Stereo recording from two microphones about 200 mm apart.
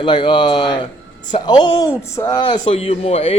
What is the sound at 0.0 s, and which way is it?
Speech, 25° left (ahead or behind).